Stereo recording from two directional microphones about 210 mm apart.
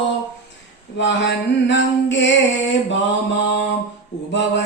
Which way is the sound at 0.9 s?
60° left (ahead or behind).